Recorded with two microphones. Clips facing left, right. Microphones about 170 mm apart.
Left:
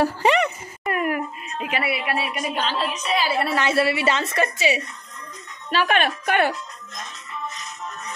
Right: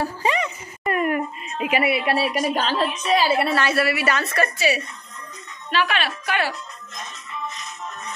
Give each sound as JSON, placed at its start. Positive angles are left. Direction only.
{"t": 0.0, "sound": "a sound", "side_deg": 70}
{"t": 0.8, "sound": "a sound", "side_deg": 5}
{"t": 1.6, "sound": "a woman's voice", "side_deg": -10}
{"t": 1.9, "sound": "a woman's voice", "side_deg": -30}
{"t": 3.5, "sound": "a woman's voice", "side_deg": 25}
{"t": 5.7, "sound": "speech", "side_deg": 45}